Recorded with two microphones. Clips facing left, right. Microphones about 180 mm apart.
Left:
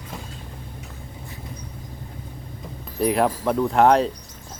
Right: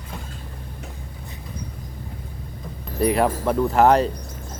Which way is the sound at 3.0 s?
Centre (ahead or behind).